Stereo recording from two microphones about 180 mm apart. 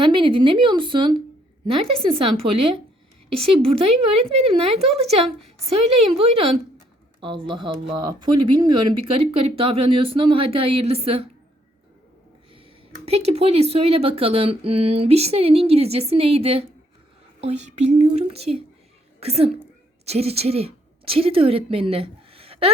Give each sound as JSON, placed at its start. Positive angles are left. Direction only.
{"t": 0.0, "sound": "speech", "side_deg": -25}
{"t": 5.0, "sound": "speech", "side_deg": 0}
{"t": 5.6, "sound": "speech", "side_deg": -35}
{"t": 13.1, "sound": "a woman's voice", "side_deg": -35}